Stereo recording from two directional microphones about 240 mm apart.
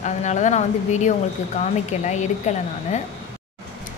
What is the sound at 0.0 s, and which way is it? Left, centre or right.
A woman's voice, left.